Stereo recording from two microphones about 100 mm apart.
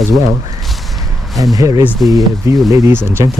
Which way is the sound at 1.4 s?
35° right (ahead or behind).